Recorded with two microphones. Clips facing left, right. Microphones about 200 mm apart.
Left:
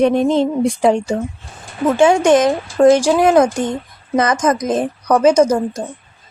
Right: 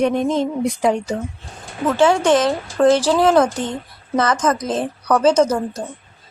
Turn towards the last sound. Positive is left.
turn(degrees=10)  # may be behind; listen again after turning